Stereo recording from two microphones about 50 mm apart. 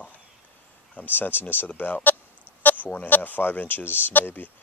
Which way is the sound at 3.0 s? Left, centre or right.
Left.